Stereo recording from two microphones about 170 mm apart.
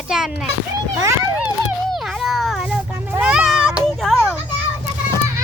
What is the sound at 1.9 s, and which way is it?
Children playing, centre (ahead or behind).